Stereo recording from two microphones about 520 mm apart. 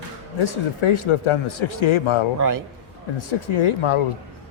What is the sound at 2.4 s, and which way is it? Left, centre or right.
Speech, right.